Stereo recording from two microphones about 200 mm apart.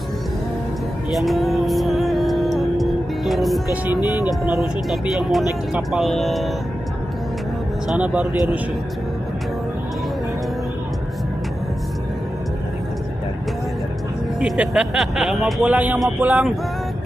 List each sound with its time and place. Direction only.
1.1 s music: centre (ahead or behind)
3.9 s speech: 20° left (ahead or behind)
4.3 s speech: centre (ahead or behind)
7.9 s speech: 5° right (ahead or behind)
14.4 s speech: 5° right (ahead or behind)